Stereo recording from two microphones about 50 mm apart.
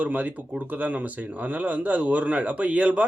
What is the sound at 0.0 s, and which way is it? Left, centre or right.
Speech, right.